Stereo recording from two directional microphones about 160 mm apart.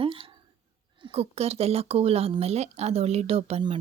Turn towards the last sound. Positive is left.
turn(degrees=-40)  # may be behind; listen again after turning